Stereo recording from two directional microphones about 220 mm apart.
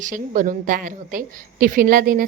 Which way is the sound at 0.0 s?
35° right (ahead or behind).